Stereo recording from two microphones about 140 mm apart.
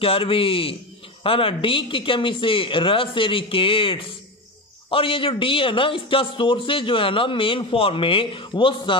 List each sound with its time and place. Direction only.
0.0 s speech: 40° left (ahead or behind)